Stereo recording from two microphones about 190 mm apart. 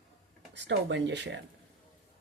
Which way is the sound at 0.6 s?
65° right (ahead or behind).